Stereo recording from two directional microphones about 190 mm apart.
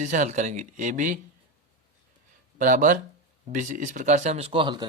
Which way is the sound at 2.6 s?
45° right (ahead or behind).